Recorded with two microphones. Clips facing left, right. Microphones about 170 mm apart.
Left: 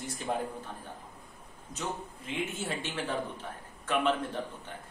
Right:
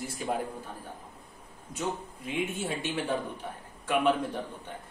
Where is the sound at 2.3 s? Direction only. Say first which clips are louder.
Right 3 dB; 15° right (ahead or behind).